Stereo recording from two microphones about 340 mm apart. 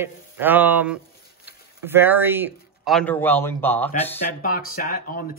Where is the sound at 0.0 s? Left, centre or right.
Centre.